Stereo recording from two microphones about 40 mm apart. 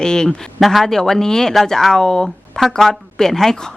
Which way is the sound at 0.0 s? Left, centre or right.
Centre.